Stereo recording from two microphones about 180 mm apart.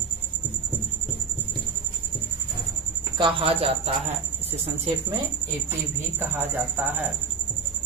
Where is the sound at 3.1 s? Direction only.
30° right (ahead or behind).